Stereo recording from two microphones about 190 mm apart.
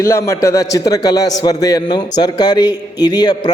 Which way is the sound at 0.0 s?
15° left (ahead or behind).